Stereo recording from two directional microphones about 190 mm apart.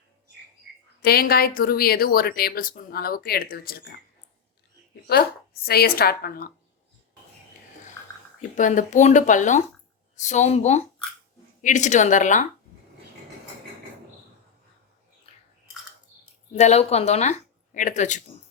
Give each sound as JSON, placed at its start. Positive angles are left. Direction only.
{"t": 1.0, "sound": "speech", "side_deg": 55}
{"t": 5.1, "sound": "a woman's voice", "side_deg": 55}
{"t": 8.0, "sound": "a sound", "side_deg": 15}
{"t": 8.4, "sound": "speech", "side_deg": 40}
{"t": 16.5, "sound": "speech", "side_deg": 35}